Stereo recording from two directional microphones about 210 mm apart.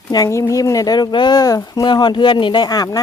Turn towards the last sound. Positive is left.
turn(degrees=20)  # may be behind; listen again after turning